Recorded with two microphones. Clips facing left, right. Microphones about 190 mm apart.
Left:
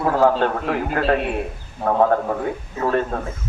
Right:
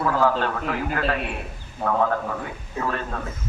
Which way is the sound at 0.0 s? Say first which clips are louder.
Left 4 dB; 50° left (ahead or behind).